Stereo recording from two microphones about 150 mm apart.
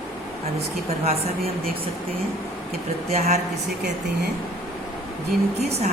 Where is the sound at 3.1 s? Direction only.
50° right (ahead or behind).